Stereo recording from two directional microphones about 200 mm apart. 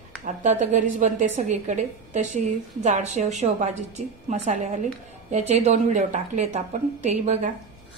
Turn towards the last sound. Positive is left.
turn(degrees=-35)  # may be behind; listen again after turning